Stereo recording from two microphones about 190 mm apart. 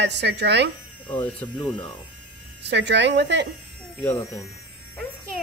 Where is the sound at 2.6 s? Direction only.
65° right (ahead or behind).